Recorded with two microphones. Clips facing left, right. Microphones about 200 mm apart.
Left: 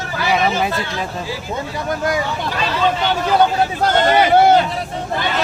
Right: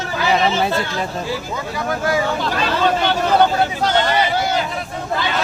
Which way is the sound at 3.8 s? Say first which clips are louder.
Left 6 dB; 50° left (ahead or behind).